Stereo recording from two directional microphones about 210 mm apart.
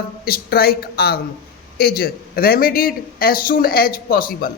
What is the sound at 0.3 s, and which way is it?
Speech, 45° left (ahead or behind).